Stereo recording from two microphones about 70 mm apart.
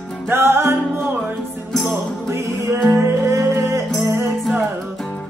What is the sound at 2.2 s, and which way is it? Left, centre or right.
Music, right.